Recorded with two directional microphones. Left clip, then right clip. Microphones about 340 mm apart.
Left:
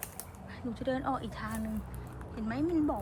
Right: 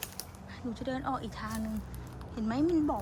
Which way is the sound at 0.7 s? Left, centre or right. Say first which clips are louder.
Left 2 dB; centre.